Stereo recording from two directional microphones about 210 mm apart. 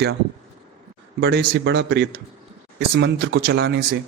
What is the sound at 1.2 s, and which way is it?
A man's voice, 55° right (ahead or behind).